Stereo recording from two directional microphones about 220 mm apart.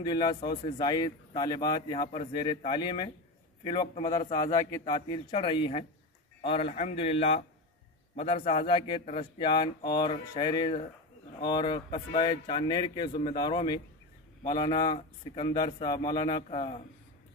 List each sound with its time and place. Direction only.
0.0 s speech: 20° left (ahead or behind)